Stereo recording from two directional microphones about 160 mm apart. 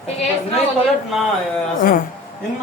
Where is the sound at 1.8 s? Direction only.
60° left (ahead or behind).